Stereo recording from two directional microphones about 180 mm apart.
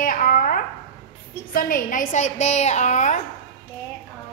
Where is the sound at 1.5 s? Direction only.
50° left (ahead or behind).